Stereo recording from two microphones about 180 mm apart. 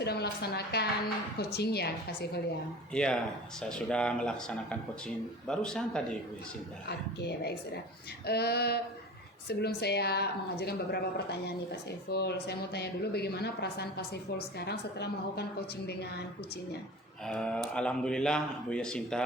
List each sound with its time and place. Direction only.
0.0 s speech: 65° left (ahead or behind)
2.9 s speech: 5° left (ahead or behind)
6.8 s a woman's voice: 65° left (ahead or behind)
17.2 s speech: 5° left (ahead or behind)